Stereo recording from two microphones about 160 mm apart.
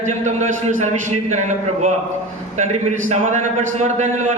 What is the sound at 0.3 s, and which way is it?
Speech, 45° right (ahead or behind).